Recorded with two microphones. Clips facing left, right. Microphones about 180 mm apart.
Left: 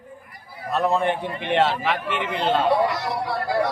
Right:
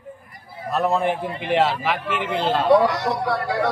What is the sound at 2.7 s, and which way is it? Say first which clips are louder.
Speech: right 4 dB; 70° right (ahead or behind).